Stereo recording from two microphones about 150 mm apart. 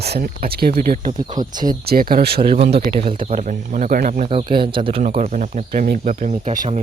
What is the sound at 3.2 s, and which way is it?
Speech, 55° right (ahead or behind).